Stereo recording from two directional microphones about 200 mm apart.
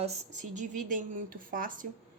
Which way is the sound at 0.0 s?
35° right (ahead or behind).